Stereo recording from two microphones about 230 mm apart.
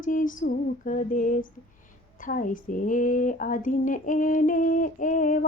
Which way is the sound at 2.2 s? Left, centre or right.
Left.